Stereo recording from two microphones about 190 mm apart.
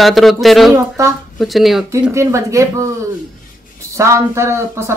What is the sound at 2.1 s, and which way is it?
Speech, 15° right (ahead or behind).